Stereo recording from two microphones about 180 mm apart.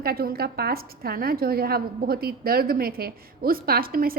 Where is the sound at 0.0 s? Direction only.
60° right (ahead or behind).